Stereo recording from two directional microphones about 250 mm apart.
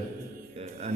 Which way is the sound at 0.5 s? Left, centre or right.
Right.